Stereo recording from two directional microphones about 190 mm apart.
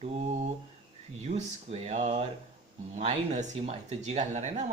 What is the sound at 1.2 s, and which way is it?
Speech, 35° right (ahead or behind).